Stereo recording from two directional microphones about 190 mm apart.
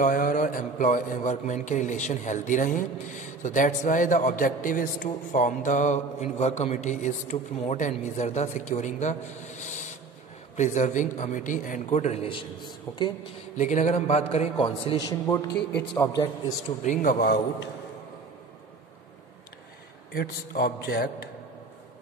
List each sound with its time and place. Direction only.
0.0 s a man's voice: 45° left (ahead or behind); by 13.1 s 25° left (ahead or behind)
13.6 s a man's voice: 40° left (ahead or behind); by 15.5 s 20° left (ahead or behind)
16.8 s a man's voice: 45° left (ahead or behind)
20.2 s a man's voice: 50° left (ahead or behind)